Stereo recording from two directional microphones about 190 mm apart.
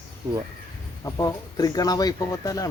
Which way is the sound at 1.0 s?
20° left (ahead or behind).